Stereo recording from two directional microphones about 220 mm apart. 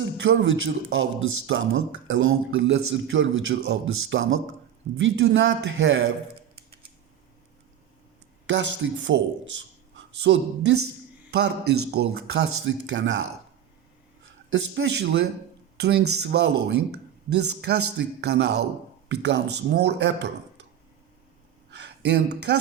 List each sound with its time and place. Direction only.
0.0 s a man's voice: 60° right (ahead or behind)
8.4 s a man's voice: 55° right (ahead or behind)
14.3 s speech: 60° right (ahead or behind)
21.7 s a sound: 50° right (ahead or behind)